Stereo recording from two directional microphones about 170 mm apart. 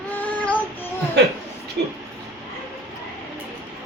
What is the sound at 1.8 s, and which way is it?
Speech, 80° right.